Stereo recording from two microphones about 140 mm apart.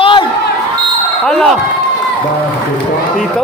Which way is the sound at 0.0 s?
40° left (ahead or behind).